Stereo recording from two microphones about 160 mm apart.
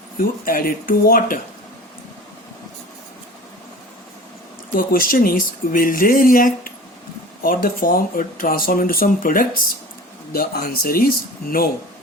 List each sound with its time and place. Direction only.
0.2 s speech: 65° left (ahead or behind)
4.7 s speech: 65° left (ahead or behind)